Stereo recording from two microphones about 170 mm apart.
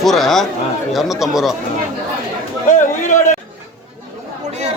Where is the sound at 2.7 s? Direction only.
50° left (ahead or behind).